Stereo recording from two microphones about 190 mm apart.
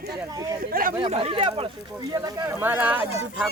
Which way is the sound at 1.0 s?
30° right (ahead or behind).